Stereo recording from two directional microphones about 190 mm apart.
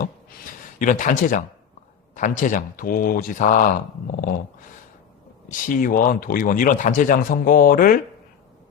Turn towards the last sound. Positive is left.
turn(degrees=45)  # may be behind; listen again after turning